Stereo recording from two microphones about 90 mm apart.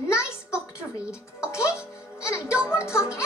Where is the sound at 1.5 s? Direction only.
30° left (ahead or behind).